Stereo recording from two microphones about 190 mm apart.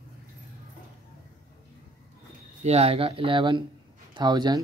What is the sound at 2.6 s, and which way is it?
Speech, 35° right (ahead or behind).